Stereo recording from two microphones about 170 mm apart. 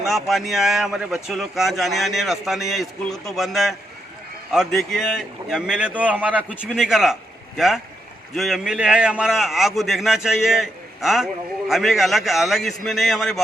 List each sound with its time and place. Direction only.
0.0 s speech: centre (ahead or behind)